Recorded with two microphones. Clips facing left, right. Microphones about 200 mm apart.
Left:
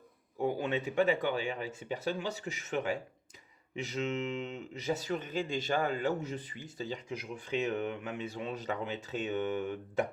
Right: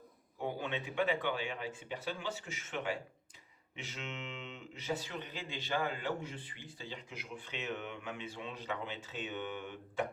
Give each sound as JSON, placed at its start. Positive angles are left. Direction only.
{"t": 0.4, "sound": "speech", "side_deg": 45}